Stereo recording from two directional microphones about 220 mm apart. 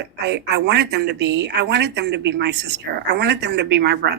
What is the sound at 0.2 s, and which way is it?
A woman's voice, 50° right (ahead or behind).